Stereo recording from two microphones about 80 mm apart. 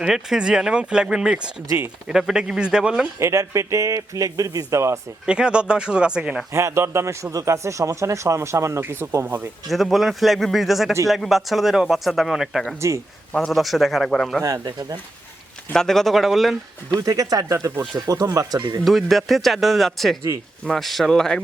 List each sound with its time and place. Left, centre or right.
0.0 s speech: centre
3.2 s a man's voice: right
5.2 s speech: centre
6.5 s a man's voice: right
9.6 s speech: centre
14.4 s speech: right
15.7 s speech: centre
16.9 s speech: right
18.9 s speech: centre